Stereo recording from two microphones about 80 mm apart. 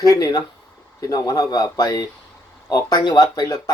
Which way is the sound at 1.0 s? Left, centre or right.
Left.